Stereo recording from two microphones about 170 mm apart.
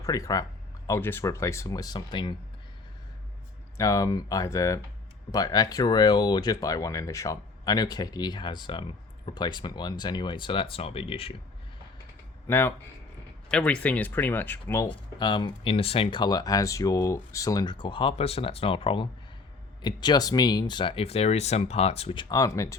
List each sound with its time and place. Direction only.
0.0 s speech: 20° left (ahead or behind)
3.8 s speech: 20° left (ahead or behind)
12.5 s speech: 15° left (ahead or behind)